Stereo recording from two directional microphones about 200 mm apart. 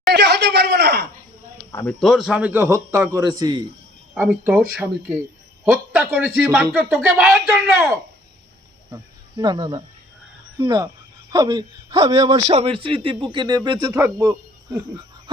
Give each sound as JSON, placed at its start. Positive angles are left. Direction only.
{"t": 0.1, "sound": "speech", "side_deg": -60}
{"t": 1.7, "sound": "a man's voice", "side_deg": 5}
{"t": 4.1, "sound": "a man's voice", "side_deg": -10}
{"t": 9.4, "sound": "a man's voice", "side_deg": -20}